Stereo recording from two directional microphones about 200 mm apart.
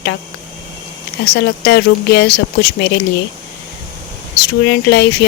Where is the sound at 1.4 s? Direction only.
60° left (ahead or behind).